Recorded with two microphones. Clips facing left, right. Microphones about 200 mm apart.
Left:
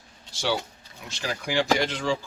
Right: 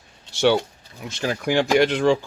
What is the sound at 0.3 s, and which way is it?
Speech, 65° right (ahead or behind).